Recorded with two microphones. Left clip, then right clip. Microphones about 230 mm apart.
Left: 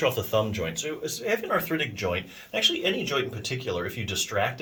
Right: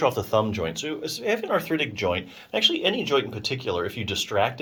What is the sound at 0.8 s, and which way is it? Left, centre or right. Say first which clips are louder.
Speech: right 1 dB; centre.